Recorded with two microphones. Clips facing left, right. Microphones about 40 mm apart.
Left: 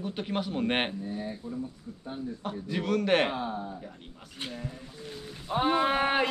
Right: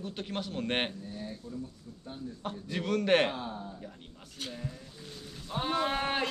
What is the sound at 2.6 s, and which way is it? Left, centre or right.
A man's voice, centre.